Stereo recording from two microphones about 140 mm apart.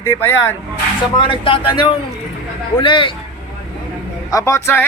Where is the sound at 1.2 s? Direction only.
40° left (ahead or behind).